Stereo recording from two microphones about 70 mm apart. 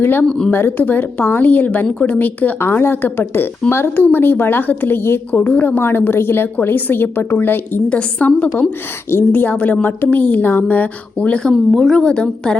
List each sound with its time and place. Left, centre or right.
0.0 s a woman's voice: left
0.3 s a woman's voice: centre
0.5 s a woman's voice: left
5.3 s a woman's voice: left
7.9 s a woman's voice: centre
9.0 s a woman's voice: left
9.4 s a woman's voice: left
11.5 s a woman's voice: centre